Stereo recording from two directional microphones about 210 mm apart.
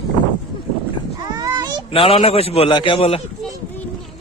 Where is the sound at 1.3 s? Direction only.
15° right (ahead or behind).